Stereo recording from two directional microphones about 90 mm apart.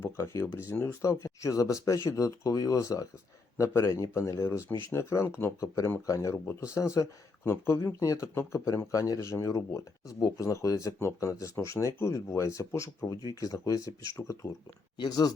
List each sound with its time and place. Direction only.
0.0 s speech: 25° left (ahead or behind)
7.4 s speech: 25° left (ahead or behind)
14.9 s speech: 50° left (ahead or behind)